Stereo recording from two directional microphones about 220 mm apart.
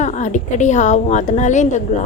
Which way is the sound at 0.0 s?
35° left (ahead or behind).